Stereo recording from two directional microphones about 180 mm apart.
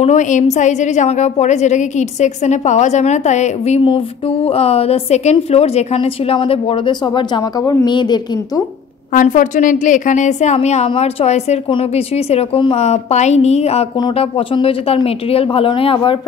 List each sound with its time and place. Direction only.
0.0 s a woman's voice: 45° left (ahead or behind); by 8.6 s 25° left (ahead or behind)
9.1 s a woman's voice: 45° left (ahead or behind); by 16.2 s 30° left (ahead or behind)